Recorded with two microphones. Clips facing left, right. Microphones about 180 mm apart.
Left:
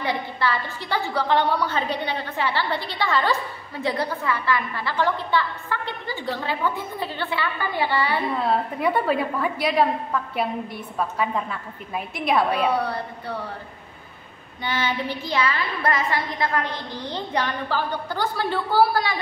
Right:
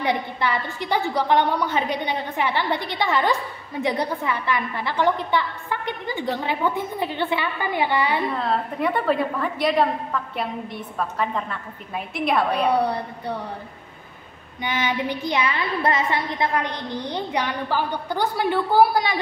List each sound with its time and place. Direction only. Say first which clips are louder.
0.0 s child singing: right 2 dB; 20° right (ahead or behind)
3.8 s a woman's voice: right 1 dB; 20° right (ahead or behind)
8.4 s a woman's voice: left 1 dB; 5° left (ahead or behind)
14.6 s child singing: right 1 dB; 15° right (ahead or behind)